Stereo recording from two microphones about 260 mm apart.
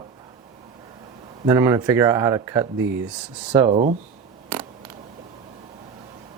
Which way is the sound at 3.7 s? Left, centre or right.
Right.